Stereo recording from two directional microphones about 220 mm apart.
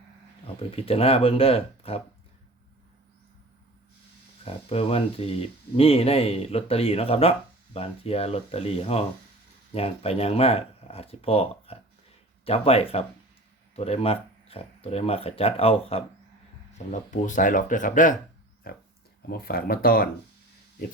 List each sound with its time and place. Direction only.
0.4 s speech: 25° left (ahead or behind)
4.4 s speech: 25° left (ahead or behind); by 20.1 s 40° left (ahead or behind)